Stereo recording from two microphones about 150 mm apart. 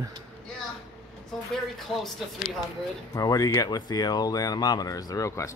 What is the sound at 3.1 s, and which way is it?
Speech, 25° left (ahead or behind).